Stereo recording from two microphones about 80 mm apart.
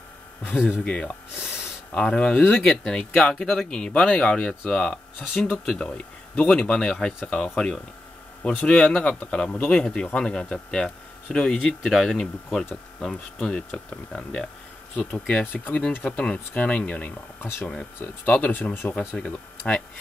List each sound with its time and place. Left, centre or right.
0.8 s speech: centre
1.4 s a sound: centre
1.9 s speech: centre
18.9 s speech: centre